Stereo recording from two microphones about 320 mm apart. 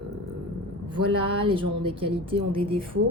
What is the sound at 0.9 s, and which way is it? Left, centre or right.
Speech, centre.